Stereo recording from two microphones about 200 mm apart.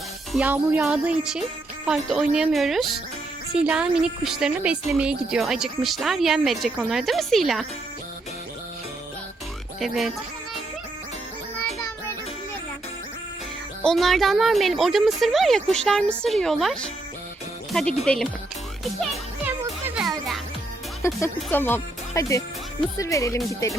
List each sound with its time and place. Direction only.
0.3 s speech: 10° right (ahead or behind)
9.8 s speech: centre (ahead or behind)
13.8 s speech: centre (ahead or behind)
20.0 s music: centre (ahead or behind)
21.0 s speech: 10° left (ahead or behind)